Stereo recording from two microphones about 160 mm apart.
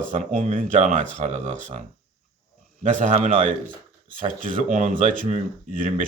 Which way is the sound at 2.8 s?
50° right (ahead or behind).